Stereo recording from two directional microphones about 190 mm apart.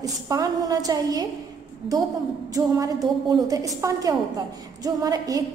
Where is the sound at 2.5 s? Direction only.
20° right (ahead or behind).